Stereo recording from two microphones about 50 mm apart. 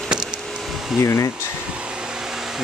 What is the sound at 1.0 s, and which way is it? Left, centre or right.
Speech, left.